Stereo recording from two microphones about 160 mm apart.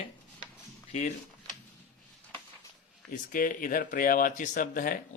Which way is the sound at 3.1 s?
60° left (ahead or behind).